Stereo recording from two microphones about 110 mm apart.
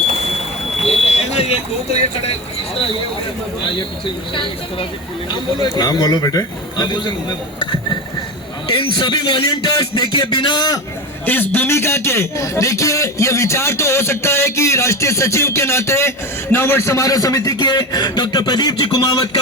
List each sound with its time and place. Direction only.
1.0 s vehicle: 70° left (ahead or behind)
3.8 s speech: 50° left (ahead or behind)
5.3 s a man's voice: 40° left (ahead or behind)
8.7 s a man's voice: 50° left (ahead or behind)
11.3 s a man's voice: 15° left (ahead or behind); by 19.4 s 35° left (ahead or behind)